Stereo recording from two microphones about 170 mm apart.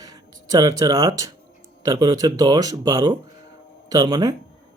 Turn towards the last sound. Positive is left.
turn(degrees=-25)  # may be behind; listen again after turning